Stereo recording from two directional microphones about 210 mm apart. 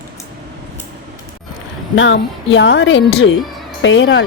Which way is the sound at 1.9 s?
60° left (ahead or behind).